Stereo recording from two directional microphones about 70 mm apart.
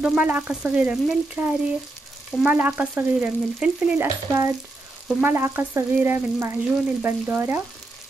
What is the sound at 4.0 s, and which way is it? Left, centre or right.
Frying, right.